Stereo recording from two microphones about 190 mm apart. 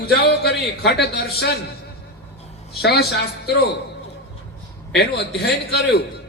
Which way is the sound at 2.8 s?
60° left (ahead or behind).